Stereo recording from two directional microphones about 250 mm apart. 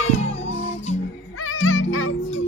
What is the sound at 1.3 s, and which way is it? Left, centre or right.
Music, left.